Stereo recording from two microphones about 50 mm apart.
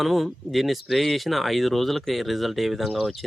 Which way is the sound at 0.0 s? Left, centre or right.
Centre.